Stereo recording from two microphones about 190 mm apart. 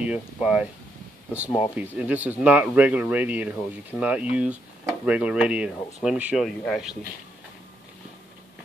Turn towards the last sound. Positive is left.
turn(degrees=0)  # may be behind; listen again after turning